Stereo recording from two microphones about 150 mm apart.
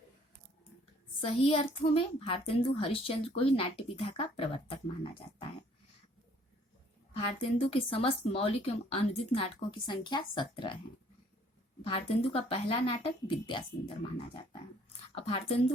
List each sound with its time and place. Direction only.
1.2 s a woman's voice: 40° left (ahead or behind)
7.6 s a woman's voice: 40° left (ahead or behind)
11.8 s a woman's voice: 40° left (ahead or behind)